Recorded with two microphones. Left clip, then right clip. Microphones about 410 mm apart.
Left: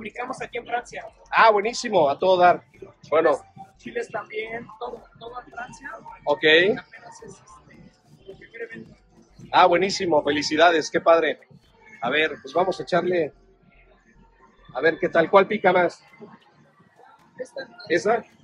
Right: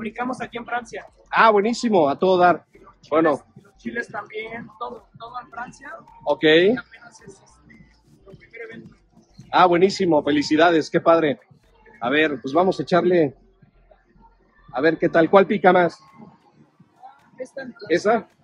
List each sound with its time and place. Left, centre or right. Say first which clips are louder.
0.0 s speech: right 4 dB; centre
3.8 s speech: right 1 dB; centre
6.2 s speech: right 1 dB; right
9.5 s speech: right 1 dB; right
14.8 s speech: right 2 dB; right
17.4 s speech: right 1 dB; right